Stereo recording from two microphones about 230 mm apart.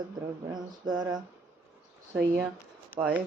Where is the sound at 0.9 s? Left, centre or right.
Centre.